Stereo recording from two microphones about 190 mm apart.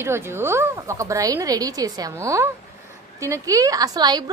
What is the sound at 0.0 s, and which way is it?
A woman's voice, 15° right (ahead or behind).